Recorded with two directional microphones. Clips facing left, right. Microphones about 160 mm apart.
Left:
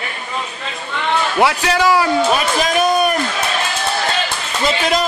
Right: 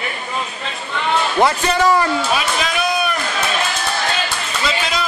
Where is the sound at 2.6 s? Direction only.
45° left (ahead or behind).